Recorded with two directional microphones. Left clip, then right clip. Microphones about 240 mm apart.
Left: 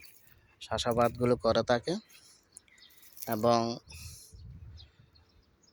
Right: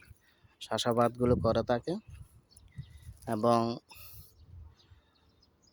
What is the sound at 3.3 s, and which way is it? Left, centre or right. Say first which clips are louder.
Speech: even; centre.